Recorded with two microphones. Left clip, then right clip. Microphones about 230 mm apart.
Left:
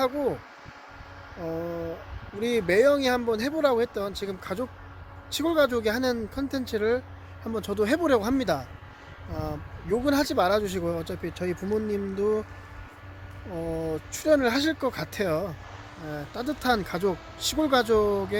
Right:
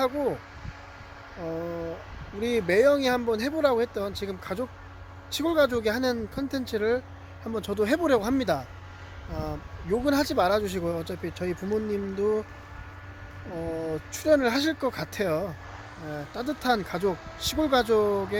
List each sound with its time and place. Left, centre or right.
0.0 s speech: centre
1.4 s speech: centre
13.6 s a sound: centre
13.9 s speech: centre